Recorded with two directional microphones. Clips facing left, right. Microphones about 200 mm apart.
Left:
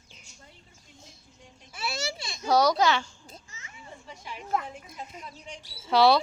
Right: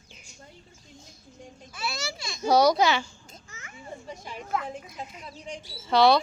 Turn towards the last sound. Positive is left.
turn(degrees=5)  # may be behind; listen again after turning